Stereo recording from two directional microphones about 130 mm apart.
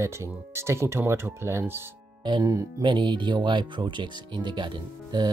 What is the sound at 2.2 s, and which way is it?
Speech, 30° right (ahead or behind).